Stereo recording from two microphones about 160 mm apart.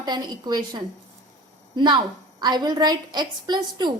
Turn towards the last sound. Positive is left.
turn(degrees=-25)  # may be behind; listen again after turning